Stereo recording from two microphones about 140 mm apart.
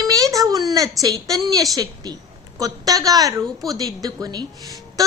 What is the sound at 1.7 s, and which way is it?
A woman's voice, 25° right (ahead or behind).